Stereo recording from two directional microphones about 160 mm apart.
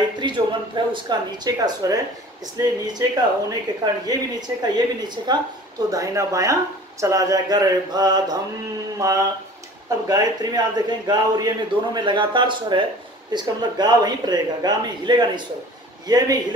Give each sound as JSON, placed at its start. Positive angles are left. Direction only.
{"t": 0.2, "sound": "speech", "side_deg": -30}